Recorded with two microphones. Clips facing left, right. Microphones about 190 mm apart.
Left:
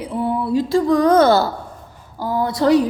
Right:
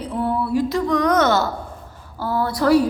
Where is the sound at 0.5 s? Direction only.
30° left (ahead or behind).